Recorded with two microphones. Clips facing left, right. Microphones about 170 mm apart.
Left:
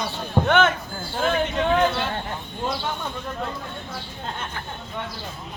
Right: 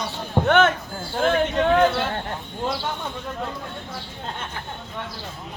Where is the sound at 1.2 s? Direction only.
50° right (ahead or behind).